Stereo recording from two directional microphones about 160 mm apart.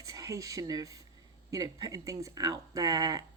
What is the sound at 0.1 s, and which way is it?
Speech, 20° right (ahead or behind).